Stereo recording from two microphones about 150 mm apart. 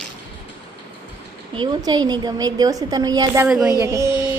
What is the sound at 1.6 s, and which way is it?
A woman's voice, 25° right (ahead or behind).